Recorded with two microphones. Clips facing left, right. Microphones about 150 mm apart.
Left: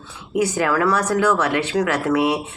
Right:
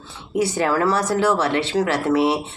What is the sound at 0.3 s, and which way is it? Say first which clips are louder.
Speech: even; 30° right (ahead or behind).